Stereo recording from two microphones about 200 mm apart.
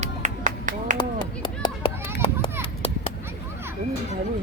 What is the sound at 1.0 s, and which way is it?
Clapping, 25° left (ahead or behind).